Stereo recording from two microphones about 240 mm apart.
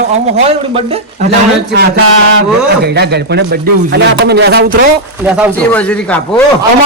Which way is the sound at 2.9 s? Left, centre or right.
Right.